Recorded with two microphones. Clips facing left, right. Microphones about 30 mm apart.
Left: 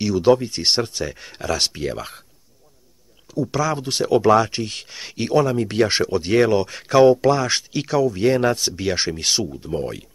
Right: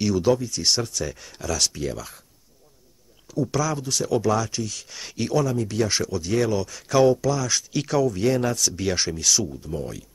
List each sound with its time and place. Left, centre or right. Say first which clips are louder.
0.2 s speech: left 5 dB; left
3.3 s speech: left 3 dB; centre
3.8 s speech: left 6 dB; left
4.8 s speech: left 2 dB; left
6.9 s speech: left 5 dB; left
7.2 s speech: left 6 dB; left
7.7 s speech: left 1 dB; centre
8.2 s speech: left 4 dB; left
8.8 s speech: left 3 dB; left
9.1 s speech: left 1 dB; left